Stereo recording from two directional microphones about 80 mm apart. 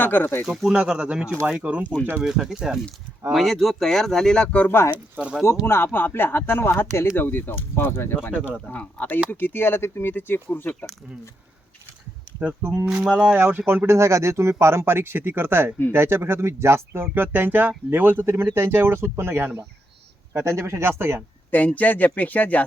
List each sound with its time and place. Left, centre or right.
0.0 s speech: left
0.4 s speech: centre
2.2 s speech: centre
4.9 s speech: centre
5.6 s speech: left
8.6 s speech: centre
12.4 s speech: centre
13.3 s speech: right
21.5 s speech: centre